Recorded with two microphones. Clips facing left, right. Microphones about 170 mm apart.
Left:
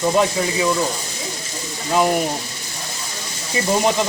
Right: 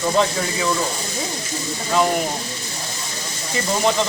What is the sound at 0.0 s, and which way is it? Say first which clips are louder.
Speech: left 2 dB; 15° left (ahead or behind).